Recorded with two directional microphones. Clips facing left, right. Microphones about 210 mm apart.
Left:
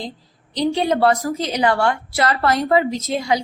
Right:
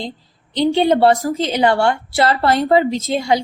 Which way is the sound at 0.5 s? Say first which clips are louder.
Right 4 dB; 25° right (ahead or behind).